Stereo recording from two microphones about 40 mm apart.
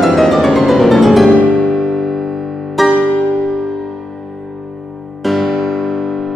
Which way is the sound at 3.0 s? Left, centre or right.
Left.